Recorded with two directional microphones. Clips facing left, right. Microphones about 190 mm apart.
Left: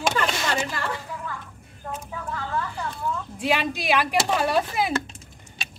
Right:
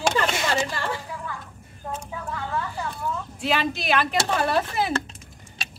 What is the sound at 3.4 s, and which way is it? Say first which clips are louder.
Speech: left 1 dB; 15° left (ahead or behind).